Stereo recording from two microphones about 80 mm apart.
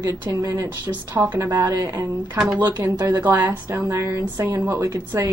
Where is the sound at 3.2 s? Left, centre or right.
Right.